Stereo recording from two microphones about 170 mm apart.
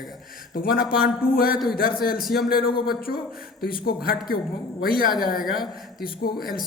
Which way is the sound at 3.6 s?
65° left (ahead or behind).